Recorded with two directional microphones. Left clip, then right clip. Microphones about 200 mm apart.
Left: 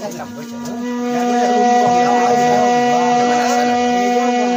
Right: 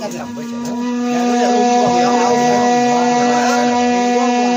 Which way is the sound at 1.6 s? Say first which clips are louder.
Left 2 dB; 50° right (ahead or behind).